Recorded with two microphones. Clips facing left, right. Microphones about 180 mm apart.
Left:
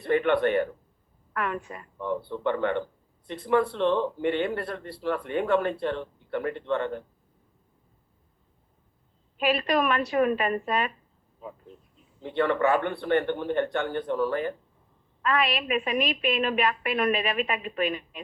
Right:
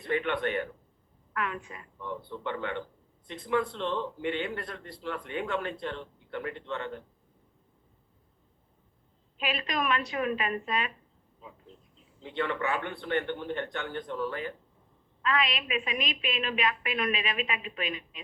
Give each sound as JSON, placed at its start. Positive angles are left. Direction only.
{"t": 0.1, "sound": "a woman's voice", "side_deg": 50}
{"t": 9.5, "sound": "a woman's voice", "side_deg": 55}
{"t": 12.2, "sound": "a woman's voice", "side_deg": 50}